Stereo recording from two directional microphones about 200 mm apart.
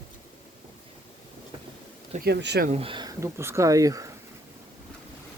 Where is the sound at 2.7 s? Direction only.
30° right (ahead or behind).